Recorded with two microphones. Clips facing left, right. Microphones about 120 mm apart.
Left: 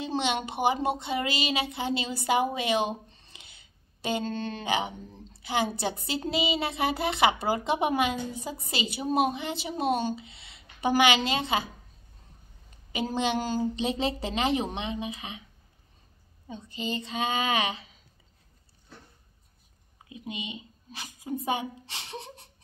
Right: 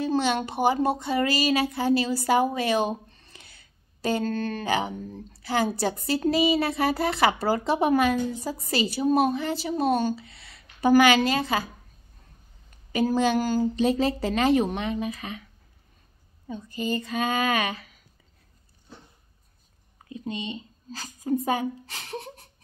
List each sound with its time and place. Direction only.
0.0 s a sound: 20° left (ahead or behind)
0.5 s speech: 20° left (ahead or behind)
3.1 s a sound: 20° left (ahead or behind)
5.8 s speech: 20° left (ahead or behind)
12.9 s speech: 20° left (ahead or behind)
16.4 s speech: 25° left (ahead or behind)
20.2 s speech: 15° left (ahead or behind)
21.3 s speech: 25° left (ahead or behind)